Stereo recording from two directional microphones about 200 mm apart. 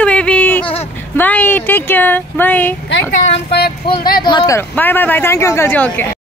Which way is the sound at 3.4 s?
55° left (ahead or behind).